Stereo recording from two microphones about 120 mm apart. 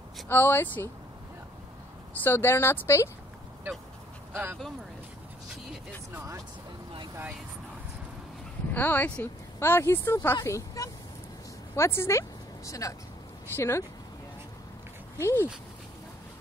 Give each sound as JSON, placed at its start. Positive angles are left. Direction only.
{"t": 0.3, "sound": "speech", "side_deg": 15}
{"t": 2.2, "sound": "speech", "side_deg": 20}
{"t": 4.3, "sound": "speech", "side_deg": -20}
{"t": 6.1, "sound": "speech", "side_deg": -25}
{"t": 8.7, "sound": "speech", "side_deg": 15}
{"t": 15.1, "sound": "speech", "side_deg": 25}